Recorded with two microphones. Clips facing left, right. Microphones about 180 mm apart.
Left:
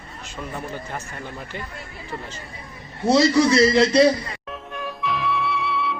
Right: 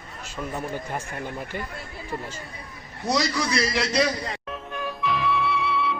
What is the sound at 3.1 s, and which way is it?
A man's voice, 25° left (ahead or behind).